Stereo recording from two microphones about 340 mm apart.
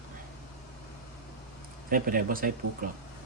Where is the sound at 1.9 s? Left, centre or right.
Right.